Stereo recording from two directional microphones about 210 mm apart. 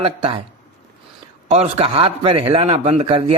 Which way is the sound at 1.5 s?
30° right (ahead or behind).